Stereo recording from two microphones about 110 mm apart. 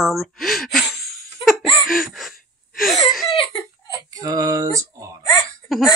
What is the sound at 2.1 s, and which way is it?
Gasp, centre (ahead or behind).